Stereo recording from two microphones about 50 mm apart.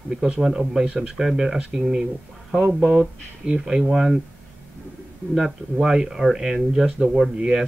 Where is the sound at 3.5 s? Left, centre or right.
Centre.